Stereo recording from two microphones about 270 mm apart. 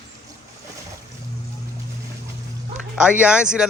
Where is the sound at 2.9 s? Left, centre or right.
Centre.